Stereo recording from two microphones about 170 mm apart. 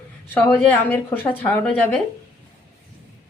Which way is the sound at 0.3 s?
10° left (ahead or behind).